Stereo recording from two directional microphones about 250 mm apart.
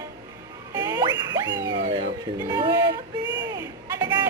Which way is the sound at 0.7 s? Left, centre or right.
Centre.